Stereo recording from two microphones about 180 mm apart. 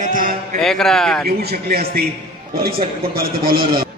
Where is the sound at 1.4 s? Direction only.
60° right (ahead or behind).